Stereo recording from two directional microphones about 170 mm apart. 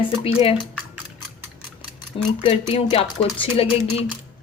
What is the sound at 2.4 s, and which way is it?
Speech, 30° left (ahead or behind).